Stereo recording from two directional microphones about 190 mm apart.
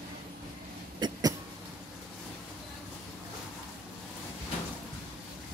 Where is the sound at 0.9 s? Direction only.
25° right (ahead or behind).